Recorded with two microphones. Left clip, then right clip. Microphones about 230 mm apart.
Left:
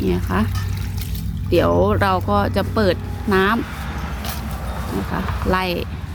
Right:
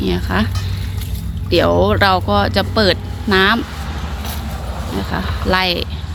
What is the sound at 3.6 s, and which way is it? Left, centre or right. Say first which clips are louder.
Vehicle: right 2 dB; left.